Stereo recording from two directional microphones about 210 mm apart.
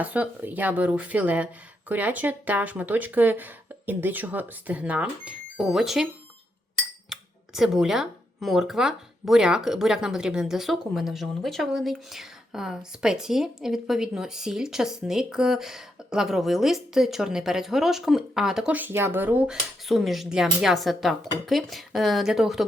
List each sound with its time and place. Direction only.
0.0 s speech: 5° right (ahead or behind)
7.1 s speech: centre (ahead or behind)